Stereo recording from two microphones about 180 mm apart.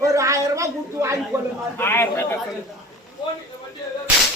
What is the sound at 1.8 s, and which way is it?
Speech, 15° left (ahead or behind).